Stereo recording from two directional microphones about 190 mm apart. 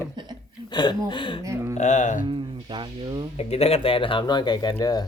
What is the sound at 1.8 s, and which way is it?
Speech, 40° left (ahead or behind).